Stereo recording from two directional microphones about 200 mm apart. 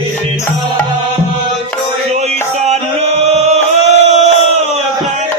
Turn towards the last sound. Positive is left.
turn(degrees=-35)  # may be behind; listen again after turning